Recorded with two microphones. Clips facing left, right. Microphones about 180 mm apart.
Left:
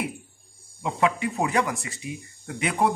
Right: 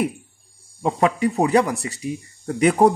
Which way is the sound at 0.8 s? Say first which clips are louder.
Right 5 dB; 40° right (ahead or behind).